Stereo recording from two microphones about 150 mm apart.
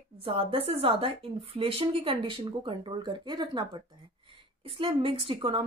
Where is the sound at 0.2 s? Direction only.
35° right (ahead or behind).